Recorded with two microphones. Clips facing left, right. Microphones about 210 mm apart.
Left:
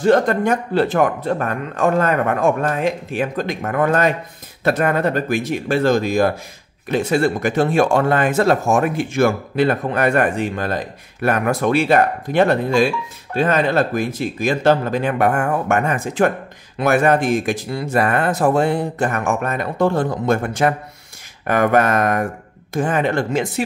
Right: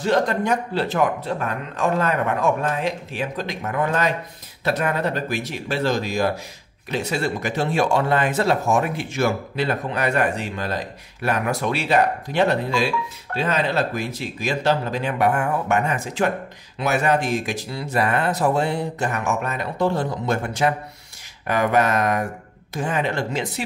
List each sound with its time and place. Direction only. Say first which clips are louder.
0.0 s speech: left 5 dB; 50° left (ahead or behind)